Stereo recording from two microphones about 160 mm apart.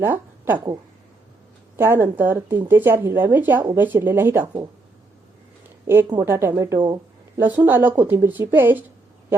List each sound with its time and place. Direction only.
0.0 s speech: 10° right (ahead or behind)
1.7 s speech: 15° right (ahead or behind)
6.1 s speech: 15° right (ahead or behind)
6.7 s speech: 30° right (ahead or behind)
7.3 s speech: 10° right (ahead or behind)